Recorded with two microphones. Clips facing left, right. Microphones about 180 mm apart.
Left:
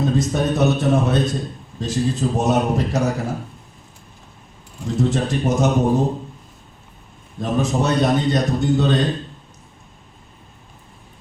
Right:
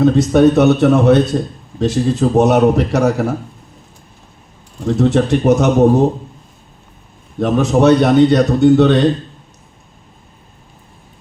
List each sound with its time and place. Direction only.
0.0 s a man's voice: 70° right (ahead or behind)
4.9 s a man's voice: 70° right (ahead or behind)
7.3 s a man's voice: 70° right (ahead or behind)